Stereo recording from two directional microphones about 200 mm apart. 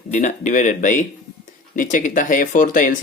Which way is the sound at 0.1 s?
40° left (ahead or behind).